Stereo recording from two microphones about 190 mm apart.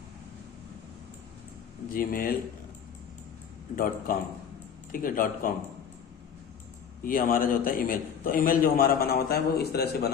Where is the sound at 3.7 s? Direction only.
50° left (ahead or behind).